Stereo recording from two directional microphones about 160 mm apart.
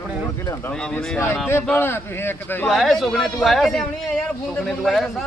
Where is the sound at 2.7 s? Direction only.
Centre (ahead or behind).